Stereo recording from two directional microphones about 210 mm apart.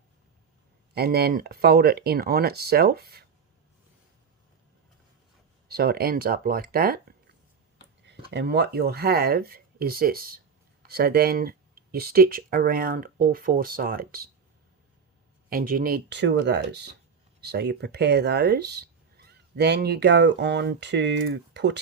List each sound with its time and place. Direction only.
0.9 s speech: 50° right (ahead or behind)
5.6 s speech: 50° right (ahead or behind)
8.0 s speech: 55° right (ahead or behind)
15.4 s speech: 45° right (ahead or behind)